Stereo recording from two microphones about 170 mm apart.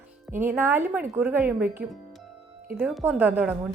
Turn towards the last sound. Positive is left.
turn(degrees=-10)  # may be behind; listen again after turning